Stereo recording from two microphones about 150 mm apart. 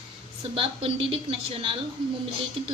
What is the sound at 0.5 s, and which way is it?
A woman's voice, 35° right (ahead or behind).